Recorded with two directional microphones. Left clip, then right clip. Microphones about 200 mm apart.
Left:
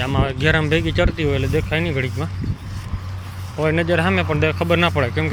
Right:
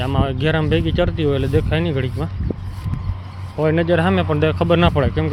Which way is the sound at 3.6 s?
20° right (ahead or behind).